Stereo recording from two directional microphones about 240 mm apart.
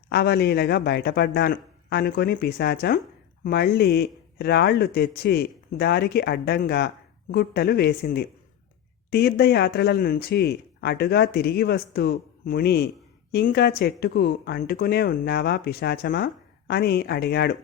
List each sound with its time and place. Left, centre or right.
0.1 s speech: left